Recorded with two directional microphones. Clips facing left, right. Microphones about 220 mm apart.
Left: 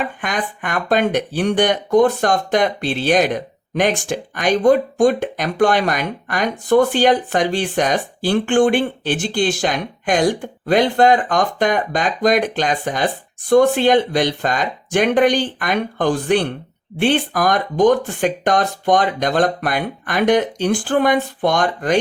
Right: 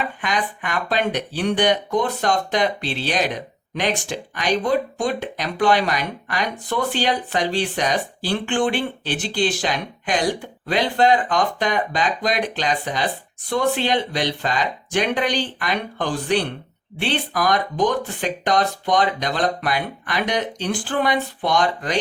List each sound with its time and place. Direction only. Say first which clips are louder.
0.2 s speech: left 1 dB; 50° left (ahead or behind)